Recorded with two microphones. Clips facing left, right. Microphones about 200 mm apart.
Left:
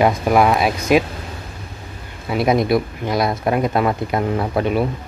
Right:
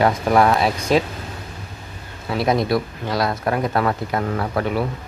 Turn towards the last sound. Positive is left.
turn(degrees=20)  # may be behind; listen again after turning